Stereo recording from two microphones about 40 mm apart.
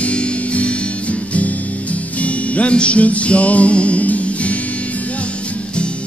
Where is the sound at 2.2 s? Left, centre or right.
Left.